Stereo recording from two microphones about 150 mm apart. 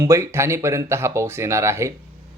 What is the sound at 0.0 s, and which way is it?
Speech, 20° right (ahead or behind).